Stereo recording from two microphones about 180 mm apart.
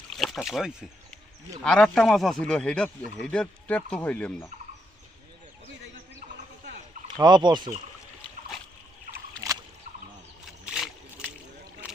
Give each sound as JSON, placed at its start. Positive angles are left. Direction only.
{"t": 0.1, "sound": "speech", "side_deg": 0}
{"t": 7.2, "sound": "speech", "side_deg": -25}